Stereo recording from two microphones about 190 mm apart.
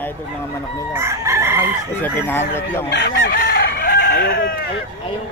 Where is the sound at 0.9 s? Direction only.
15° right (ahead or behind).